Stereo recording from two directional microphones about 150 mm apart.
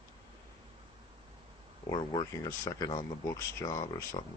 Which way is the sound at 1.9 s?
30° left (ahead or behind).